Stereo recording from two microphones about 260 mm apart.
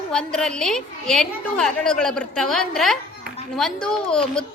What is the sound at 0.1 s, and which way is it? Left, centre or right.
A woman's voice, centre.